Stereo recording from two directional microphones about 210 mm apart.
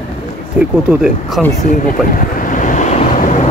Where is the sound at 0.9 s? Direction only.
Centre (ahead or behind).